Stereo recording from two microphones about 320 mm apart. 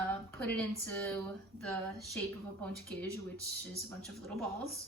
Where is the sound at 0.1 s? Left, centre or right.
Centre.